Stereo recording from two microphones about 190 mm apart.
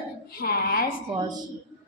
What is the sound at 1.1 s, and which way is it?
Speech, 20° right (ahead or behind).